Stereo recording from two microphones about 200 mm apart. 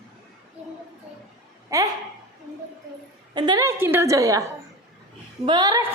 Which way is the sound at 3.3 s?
20° right (ahead or behind).